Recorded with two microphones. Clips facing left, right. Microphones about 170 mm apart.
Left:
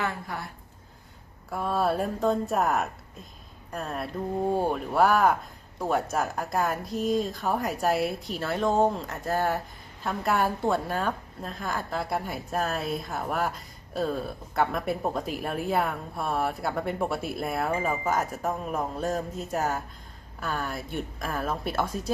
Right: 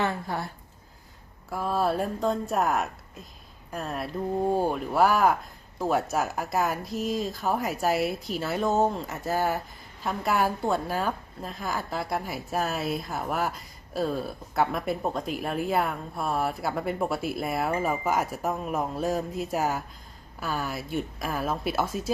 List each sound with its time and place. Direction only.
0.0 s speech: 30° right (ahead or behind)
1.5 s a woman's voice: centre (ahead or behind)